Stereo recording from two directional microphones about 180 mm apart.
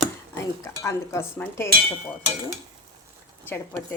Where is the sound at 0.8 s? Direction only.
15° left (ahead or behind).